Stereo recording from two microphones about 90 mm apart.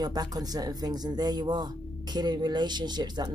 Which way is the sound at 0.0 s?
45° right (ahead or behind).